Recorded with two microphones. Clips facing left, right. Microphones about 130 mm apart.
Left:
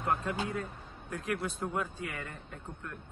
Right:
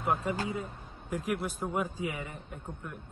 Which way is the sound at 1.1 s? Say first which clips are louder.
Right 2 dB; 10° right (ahead or behind).